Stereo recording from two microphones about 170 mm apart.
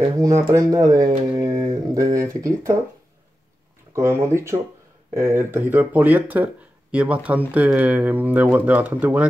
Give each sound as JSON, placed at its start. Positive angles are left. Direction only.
{"t": 0.2, "sound": "speech", "side_deg": -20}
{"t": 3.9, "sound": "speech", "side_deg": -15}